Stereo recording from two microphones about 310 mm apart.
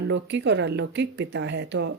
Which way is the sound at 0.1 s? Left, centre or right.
Right.